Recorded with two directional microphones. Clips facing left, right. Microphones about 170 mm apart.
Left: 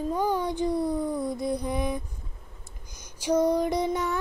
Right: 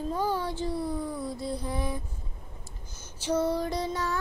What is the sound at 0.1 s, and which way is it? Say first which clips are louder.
Speech: left 3 dB; 15° left (ahead or behind).